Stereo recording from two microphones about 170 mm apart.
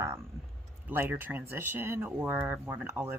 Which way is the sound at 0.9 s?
15° right (ahead or behind).